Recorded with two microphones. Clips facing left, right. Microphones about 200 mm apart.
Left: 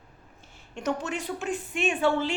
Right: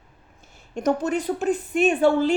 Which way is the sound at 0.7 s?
40° right (ahead or behind).